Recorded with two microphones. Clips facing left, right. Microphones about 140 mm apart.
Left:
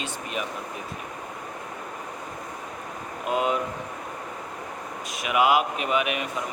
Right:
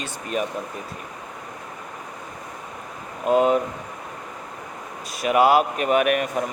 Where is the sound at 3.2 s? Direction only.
40° right (ahead or behind).